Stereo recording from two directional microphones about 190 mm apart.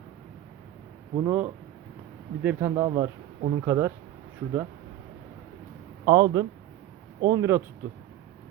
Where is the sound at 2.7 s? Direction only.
25° right (ahead or behind).